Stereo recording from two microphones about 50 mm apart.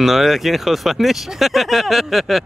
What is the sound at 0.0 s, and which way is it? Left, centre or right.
Speech, centre.